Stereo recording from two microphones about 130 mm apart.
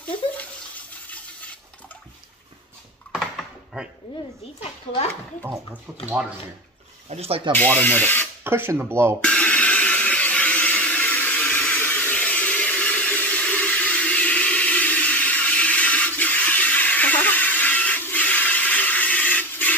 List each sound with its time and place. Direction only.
3.1 s a sound: 5° right (ahead or behind)
5.9 s speech: 10° right (ahead or behind)
7.1 s speech: 50° right (ahead or behind)
7.5 s speech: 15° left (ahead or behind)
8.5 s speech: 15° right (ahead or behind)
9.2 s a sound: 10° left (ahead or behind)